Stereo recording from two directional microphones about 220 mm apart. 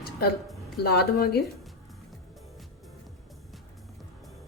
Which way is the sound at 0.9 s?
45° left (ahead or behind).